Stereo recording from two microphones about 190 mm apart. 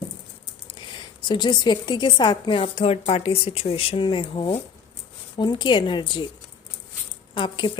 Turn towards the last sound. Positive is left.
turn(degrees=25)  # may be behind; listen again after turning